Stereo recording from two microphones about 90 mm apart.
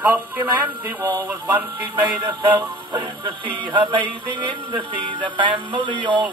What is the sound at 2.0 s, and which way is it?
Music, 55° right (ahead or behind).